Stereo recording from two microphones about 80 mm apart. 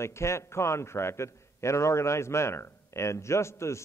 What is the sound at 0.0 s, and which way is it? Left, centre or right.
A man's voice, left.